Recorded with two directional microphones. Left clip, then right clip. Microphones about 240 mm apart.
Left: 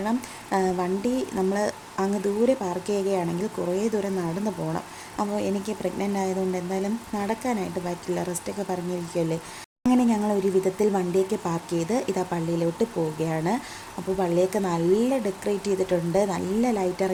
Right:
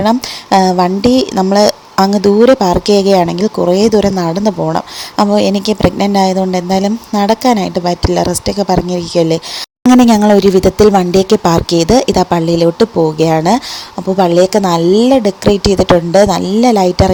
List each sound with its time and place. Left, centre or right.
0.0 s speech: right